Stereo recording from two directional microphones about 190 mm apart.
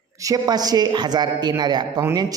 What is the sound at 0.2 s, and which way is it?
A man's voice, 20° right (ahead or behind).